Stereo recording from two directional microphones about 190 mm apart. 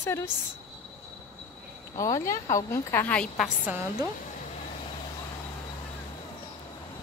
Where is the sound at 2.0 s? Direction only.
15° left (ahead or behind).